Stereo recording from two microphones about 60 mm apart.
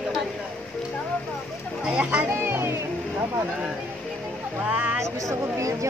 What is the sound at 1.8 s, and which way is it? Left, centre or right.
Speech, centre.